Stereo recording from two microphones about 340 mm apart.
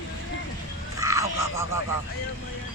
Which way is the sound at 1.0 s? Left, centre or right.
Centre.